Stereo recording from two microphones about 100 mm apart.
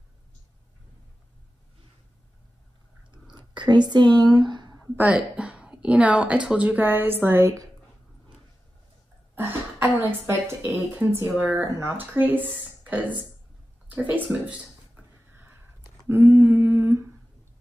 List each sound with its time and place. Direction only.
3.1 s a sound: 50° right (ahead or behind)
4.9 s a woman's voice: 15° right (ahead or behind)
9.3 s cough: 20° right (ahead or behind)
9.9 s speech: 15° right (ahead or behind)
15.0 s a sound: 15° right (ahead or behind)
16.1 s humming: 20° right (ahead or behind)